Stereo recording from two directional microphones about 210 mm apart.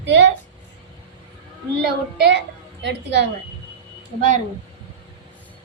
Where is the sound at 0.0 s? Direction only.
55° right (ahead or behind).